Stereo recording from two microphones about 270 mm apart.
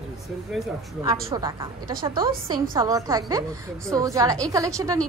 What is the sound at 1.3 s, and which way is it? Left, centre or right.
A woman's voice, centre.